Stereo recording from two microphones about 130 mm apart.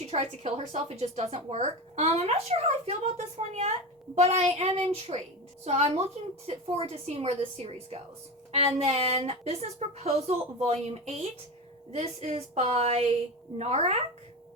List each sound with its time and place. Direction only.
0.0 s a woman's voice: 55° right (ahead or behind)